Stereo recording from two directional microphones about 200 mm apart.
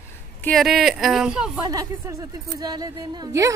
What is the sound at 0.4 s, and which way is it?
Speech, 5° left (ahead or behind).